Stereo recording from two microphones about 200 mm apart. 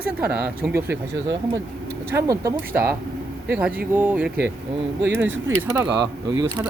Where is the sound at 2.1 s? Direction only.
15° right (ahead or behind).